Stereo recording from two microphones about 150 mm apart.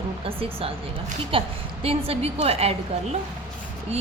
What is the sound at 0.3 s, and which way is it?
A woman's voice, 40° right (ahead or behind).